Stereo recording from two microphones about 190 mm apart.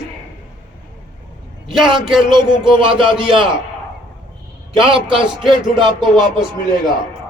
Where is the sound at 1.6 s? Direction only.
Centre (ahead or behind).